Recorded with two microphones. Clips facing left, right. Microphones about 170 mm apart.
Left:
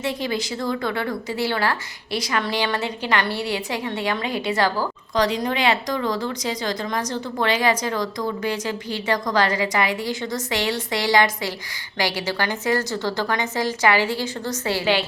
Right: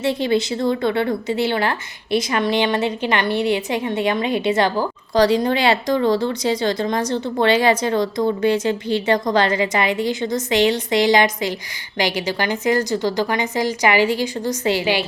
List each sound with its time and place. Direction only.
0.0 s a woman's voice: 30° right (ahead or behind)
5.1 s a woman's voice: 30° right (ahead or behind); by 15.0 s 15° right (ahead or behind)